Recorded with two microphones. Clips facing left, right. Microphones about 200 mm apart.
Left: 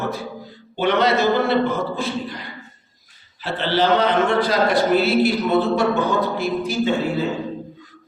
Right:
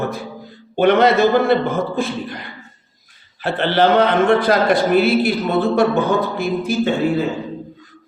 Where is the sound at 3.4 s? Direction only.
55° right (ahead or behind).